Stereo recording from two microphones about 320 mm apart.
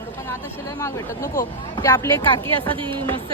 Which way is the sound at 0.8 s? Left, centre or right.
Centre.